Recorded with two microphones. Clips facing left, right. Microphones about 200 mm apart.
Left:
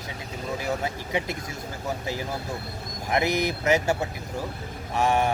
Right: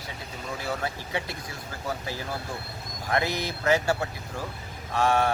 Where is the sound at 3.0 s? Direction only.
20° left (ahead or behind).